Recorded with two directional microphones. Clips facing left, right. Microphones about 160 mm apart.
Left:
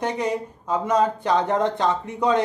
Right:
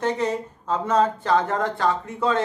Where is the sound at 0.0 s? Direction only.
15° left (ahead or behind).